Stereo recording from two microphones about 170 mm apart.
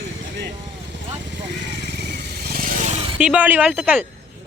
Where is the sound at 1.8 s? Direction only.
75° right (ahead or behind); by 2.9 s 55° right (ahead or behind).